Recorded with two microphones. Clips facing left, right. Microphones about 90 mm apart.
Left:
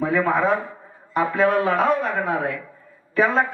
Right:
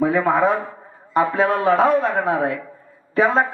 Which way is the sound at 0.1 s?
40° right (ahead or behind).